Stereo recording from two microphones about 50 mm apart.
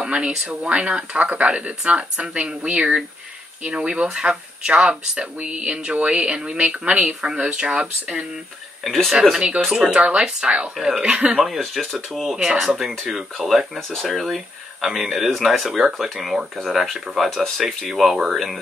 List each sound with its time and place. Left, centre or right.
0.0 s a sound: right
0.5 s speech: right
8.8 s speech: centre
9.7 s speech: centre
11.4 s speech: centre